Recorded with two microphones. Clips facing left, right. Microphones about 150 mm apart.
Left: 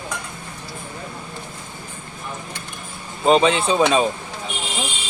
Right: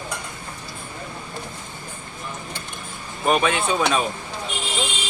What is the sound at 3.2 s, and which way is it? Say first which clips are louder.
Speech: left 4 dB; 25° left (ahead or behind).